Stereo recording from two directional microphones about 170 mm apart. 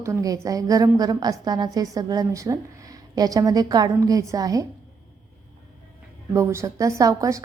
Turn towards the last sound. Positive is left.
turn(degrees=-20)  # may be behind; listen again after turning